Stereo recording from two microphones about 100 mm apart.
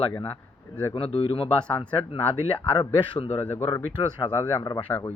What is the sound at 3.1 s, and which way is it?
Speech, 80° left.